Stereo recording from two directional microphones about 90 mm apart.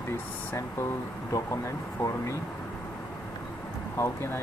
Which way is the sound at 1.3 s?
35° left (ahead or behind).